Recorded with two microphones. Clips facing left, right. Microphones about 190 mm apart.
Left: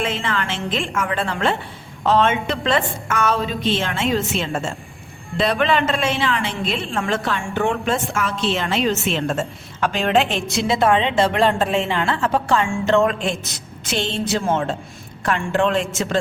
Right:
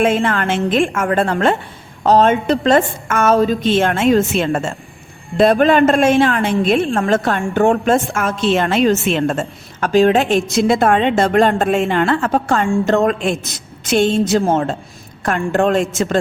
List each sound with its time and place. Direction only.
0.0 s a woman's voice: 50° right (ahead or behind)
9.8 s a woman's voice: 40° right (ahead or behind)